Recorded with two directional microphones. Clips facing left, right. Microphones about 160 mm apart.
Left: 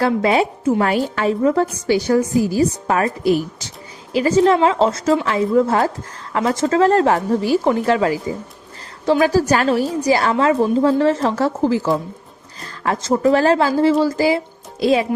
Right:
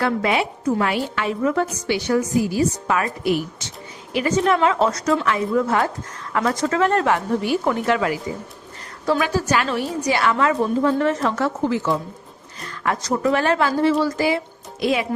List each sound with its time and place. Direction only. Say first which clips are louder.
0.0 s a woman's voice: left 4 dB; 35° left (ahead or behind)
9.2 s a woman's voice: left 6 dB; 35° left (ahead or behind)